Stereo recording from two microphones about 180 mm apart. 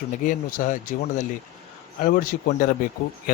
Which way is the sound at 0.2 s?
45° left (ahead or behind).